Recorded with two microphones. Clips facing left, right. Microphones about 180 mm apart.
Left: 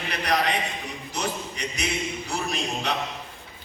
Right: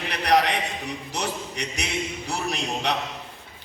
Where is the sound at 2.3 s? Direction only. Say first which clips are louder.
Right 1 dB; 70° right (ahead or behind).